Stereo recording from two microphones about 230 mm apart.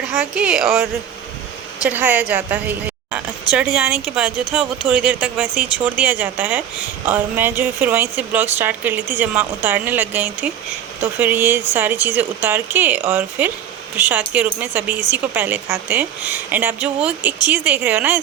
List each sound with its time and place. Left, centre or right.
0.2 s speech: centre
1.9 s speech: centre